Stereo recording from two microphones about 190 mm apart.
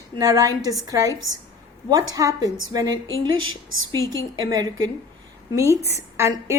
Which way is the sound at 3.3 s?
90° right.